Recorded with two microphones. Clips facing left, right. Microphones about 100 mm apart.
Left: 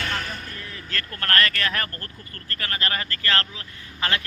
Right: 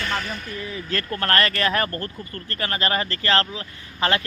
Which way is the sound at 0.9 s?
25° right (ahead or behind).